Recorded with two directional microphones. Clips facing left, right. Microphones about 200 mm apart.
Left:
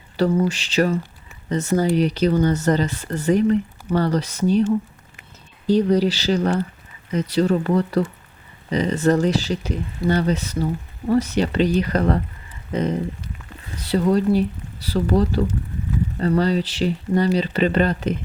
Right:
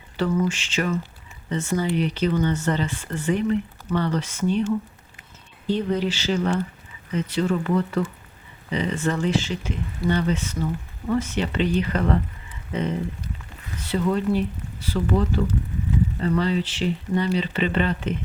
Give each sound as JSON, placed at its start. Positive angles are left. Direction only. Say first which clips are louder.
{"t": 0.2, "sound": "speech", "louder": "left 4 dB", "side_deg": 35}
{"t": 5.6, "sound": "speech", "louder": "left 6 dB", "side_deg": 40}